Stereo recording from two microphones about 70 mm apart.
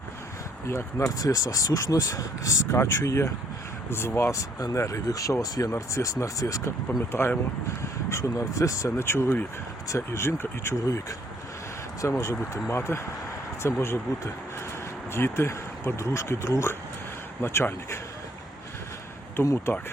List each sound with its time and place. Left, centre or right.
0.7 s speech: left
8.2 s speech: left
9.0 s speech: left
12.0 s speech: left
12.4 s speech: left
15.1 s speech: left
19.4 s speech: left